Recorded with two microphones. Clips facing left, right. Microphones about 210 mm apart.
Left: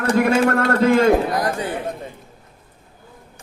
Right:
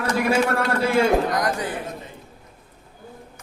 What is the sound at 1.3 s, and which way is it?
Speech, 30° left (ahead or behind).